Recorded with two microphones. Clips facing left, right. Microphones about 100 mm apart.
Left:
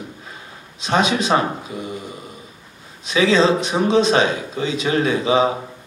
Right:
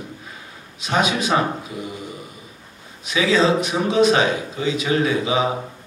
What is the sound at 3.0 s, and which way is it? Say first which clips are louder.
Speech: left 2 dB; 30° left (ahead or behind).